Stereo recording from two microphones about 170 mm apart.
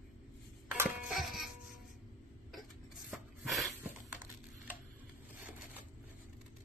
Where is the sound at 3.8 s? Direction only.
10° right (ahead or behind).